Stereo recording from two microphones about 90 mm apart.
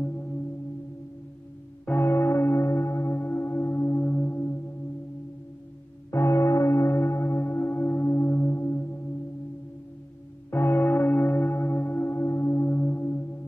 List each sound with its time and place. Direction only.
0.0 s singing bowl: 20° left (ahead or behind)
1.9 s church bell: 25° left (ahead or behind)
6.1 s church bell: 30° left (ahead or behind)
10.5 s church bell: 25° left (ahead or behind)